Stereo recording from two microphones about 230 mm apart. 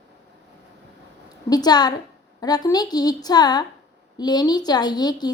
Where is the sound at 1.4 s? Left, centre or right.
Centre.